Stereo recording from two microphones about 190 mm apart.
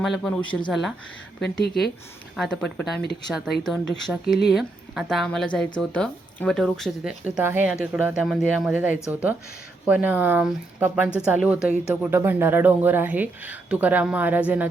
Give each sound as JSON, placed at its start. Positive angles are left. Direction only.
{"t": 0.0, "sound": "speech", "side_deg": 0}
{"t": 1.4, "sound": "speech", "side_deg": 60}
{"t": 2.3, "sound": "speech", "side_deg": 0}